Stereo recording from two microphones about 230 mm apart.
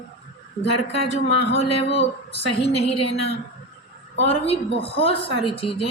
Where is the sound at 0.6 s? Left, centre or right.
Left.